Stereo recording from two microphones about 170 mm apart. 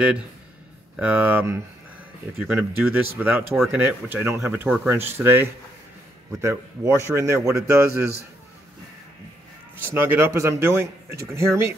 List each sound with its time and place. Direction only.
0.0 s speech: 5° right (ahead or behind)
9.9 s speech: 15° right (ahead or behind)